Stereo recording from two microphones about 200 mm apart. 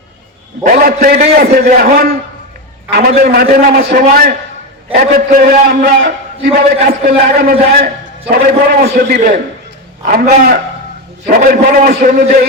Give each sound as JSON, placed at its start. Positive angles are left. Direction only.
{"t": 0.6, "sound": "a man's voice", "side_deg": -45}